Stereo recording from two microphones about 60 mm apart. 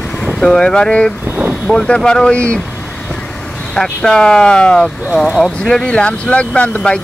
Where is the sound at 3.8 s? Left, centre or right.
Centre.